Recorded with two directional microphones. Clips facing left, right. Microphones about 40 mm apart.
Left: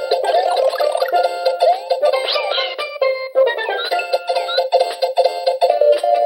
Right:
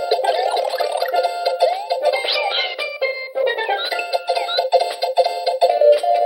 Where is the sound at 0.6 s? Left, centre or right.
Centre.